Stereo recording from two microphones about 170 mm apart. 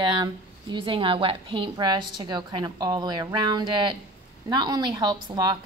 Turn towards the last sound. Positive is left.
turn(degrees=-25)  # may be behind; listen again after turning